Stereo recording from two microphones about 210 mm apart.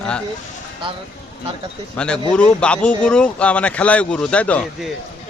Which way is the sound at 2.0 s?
5° left (ahead or behind).